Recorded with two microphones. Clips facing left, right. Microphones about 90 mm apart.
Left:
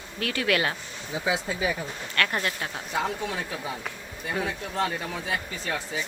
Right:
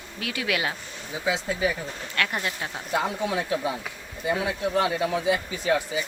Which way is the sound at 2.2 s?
15° right (ahead or behind).